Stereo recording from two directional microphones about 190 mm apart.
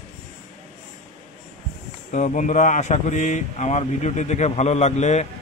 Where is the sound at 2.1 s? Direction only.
40° left (ahead or behind).